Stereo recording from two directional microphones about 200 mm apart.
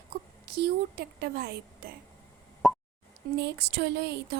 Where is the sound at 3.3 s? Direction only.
55° right (ahead or behind).